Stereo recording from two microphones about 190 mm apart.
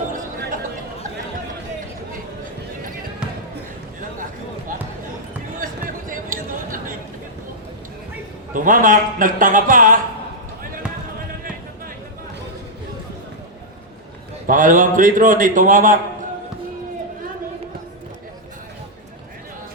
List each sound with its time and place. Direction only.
5.5 s a sound: 45° right (ahead or behind)
8.5 s a man's voice: 45° right (ahead or behind)
14.4 s a man's voice: 45° right (ahead or behind)